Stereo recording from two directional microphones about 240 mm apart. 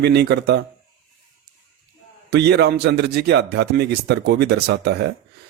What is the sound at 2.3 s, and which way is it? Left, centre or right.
Speech, right.